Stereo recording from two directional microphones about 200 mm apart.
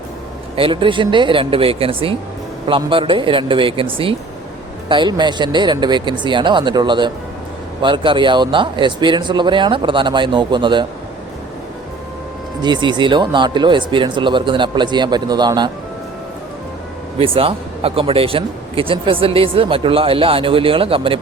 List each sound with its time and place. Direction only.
0.5 s speech: 25° right (ahead or behind)
12.6 s speech: 20° right (ahead or behind)
17.2 s speech: 25° right (ahead or behind)